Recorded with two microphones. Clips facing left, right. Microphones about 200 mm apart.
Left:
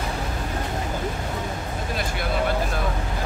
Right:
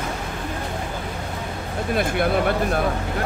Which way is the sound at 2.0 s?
55° right (ahead or behind).